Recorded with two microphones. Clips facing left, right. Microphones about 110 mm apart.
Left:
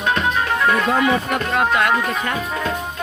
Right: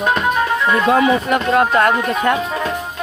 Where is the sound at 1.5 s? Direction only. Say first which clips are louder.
Right 3 dB; 40° right (ahead or behind).